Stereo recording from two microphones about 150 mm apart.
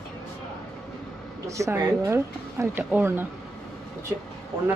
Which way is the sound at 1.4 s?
20° right (ahead or behind).